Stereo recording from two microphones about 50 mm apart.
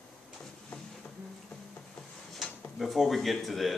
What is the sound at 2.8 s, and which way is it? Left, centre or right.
Speech, centre.